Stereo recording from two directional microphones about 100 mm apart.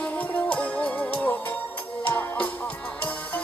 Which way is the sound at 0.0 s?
10° left (ahead or behind).